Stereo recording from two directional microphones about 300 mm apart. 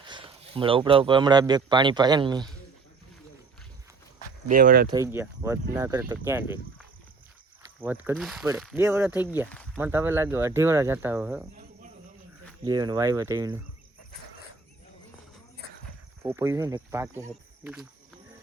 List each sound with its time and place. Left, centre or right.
0.0 s speech: centre
4.4 s speech: right
4.9 s speech: centre
7.8 s speech: centre
12.6 s speech: centre
16.2 s speech: centre